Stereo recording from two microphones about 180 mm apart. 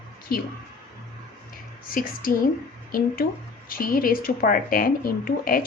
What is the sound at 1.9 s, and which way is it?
Speech, 50° left (ahead or behind).